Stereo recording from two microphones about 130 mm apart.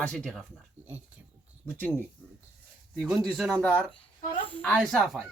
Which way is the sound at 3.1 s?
Centre (ahead or behind).